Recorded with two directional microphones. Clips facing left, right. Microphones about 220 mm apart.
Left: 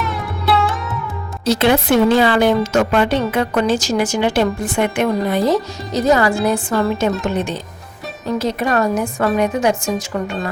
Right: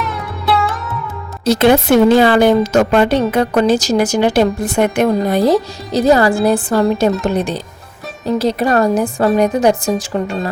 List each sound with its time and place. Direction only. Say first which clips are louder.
0.0 s sitar: even; centre (ahead or behind)
1.5 s a woman's voice: right 4 dB; 45° right (ahead or behind)